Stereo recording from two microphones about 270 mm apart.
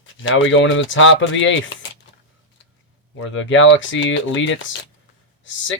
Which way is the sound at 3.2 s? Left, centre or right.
Left.